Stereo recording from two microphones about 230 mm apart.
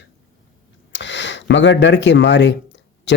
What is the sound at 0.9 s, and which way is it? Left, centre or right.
Speech, left.